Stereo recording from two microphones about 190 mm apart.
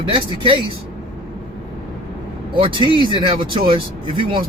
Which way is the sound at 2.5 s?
25° right (ahead or behind).